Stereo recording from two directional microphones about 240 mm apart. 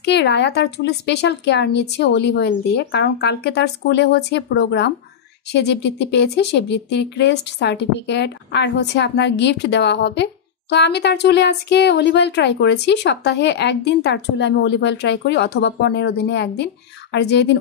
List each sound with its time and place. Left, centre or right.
0.0 s speech: left